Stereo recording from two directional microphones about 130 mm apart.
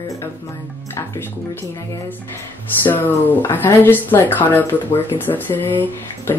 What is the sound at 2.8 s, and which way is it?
Speech, 15° left (ahead or behind).